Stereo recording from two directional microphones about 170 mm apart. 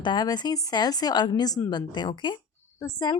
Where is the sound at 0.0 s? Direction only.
25° left (ahead or behind).